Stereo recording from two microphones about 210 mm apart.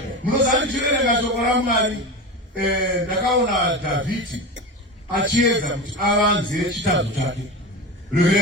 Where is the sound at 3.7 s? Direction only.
65° right (ahead or behind).